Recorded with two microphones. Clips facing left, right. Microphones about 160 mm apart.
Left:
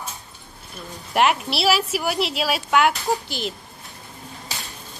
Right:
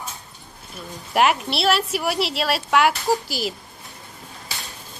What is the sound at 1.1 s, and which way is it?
Speech, centre (ahead or behind).